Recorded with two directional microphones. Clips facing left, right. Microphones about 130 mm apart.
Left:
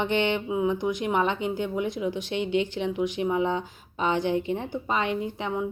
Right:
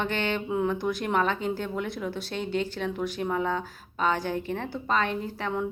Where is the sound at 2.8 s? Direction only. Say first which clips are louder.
Left 3 dB; 15° left (ahead or behind).